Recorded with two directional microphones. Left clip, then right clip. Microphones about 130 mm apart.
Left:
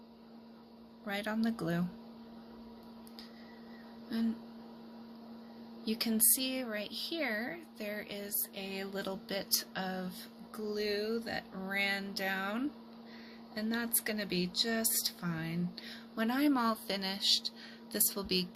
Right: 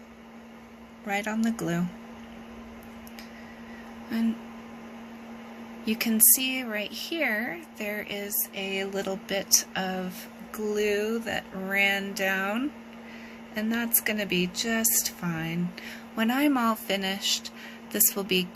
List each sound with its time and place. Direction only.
1.0 s speech: 25° left (ahead or behind)
4.1 s speech: 15° left (ahead or behind)
5.9 s speech: 15° left (ahead or behind)
10.7 s speech: centre (ahead or behind)